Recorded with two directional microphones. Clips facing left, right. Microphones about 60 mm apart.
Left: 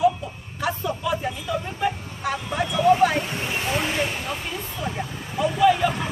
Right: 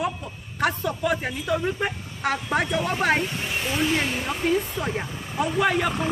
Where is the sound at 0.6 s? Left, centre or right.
Right.